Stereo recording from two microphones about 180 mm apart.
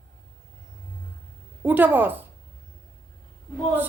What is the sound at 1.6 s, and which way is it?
Speech, 10° right (ahead or behind).